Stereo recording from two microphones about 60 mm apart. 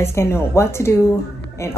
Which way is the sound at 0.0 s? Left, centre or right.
Left.